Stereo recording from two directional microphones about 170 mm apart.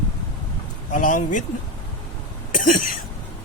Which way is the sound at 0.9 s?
50° left (ahead or behind).